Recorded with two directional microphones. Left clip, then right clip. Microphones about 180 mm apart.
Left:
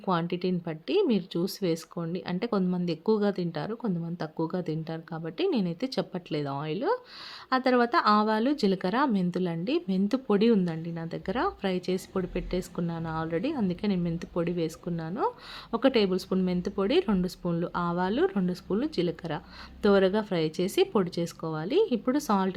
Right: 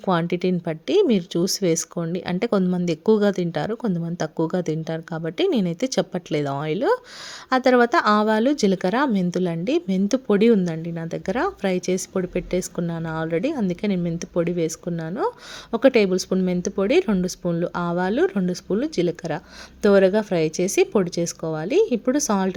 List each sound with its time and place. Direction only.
0.0 s speech: 40° right (ahead or behind)